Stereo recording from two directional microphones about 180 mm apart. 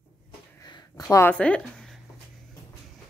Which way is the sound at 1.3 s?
5° left (ahead or behind).